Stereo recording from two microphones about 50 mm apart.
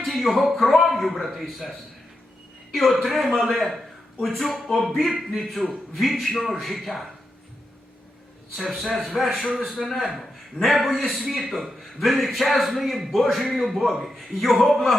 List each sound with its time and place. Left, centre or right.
0.0 s a man's voice: centre
2.7 s a man's voice: centre
4.9 s a man's voice: centre
8.5 s a man's voice: centre